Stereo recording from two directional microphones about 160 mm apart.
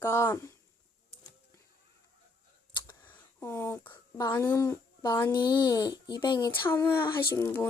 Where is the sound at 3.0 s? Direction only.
10° left (ahead or behind).